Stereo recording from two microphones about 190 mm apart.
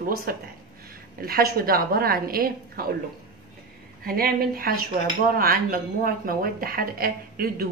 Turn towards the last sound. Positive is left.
turn(degrees=-50)  # may be behind; listen again after turning